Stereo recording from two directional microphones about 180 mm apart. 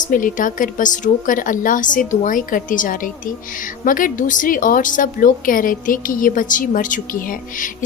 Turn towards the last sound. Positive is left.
turn(degrees=50)  # may be behind; listen again after turning